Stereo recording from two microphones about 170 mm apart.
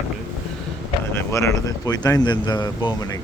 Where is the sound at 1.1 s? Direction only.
15° left (ahead or behind).